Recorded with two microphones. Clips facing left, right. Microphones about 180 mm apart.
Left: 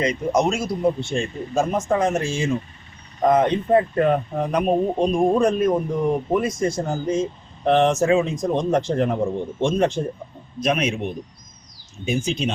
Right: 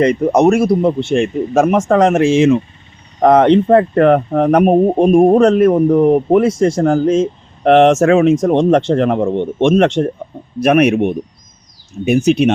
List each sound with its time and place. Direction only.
0.0 s speech: 60° right (ahead or behind); by 10.1 s 90° right
10.6 s speech: 65° right (ahead or behind)